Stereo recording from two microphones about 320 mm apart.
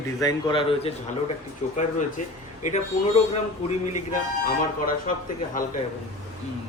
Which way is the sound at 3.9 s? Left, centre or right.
Left.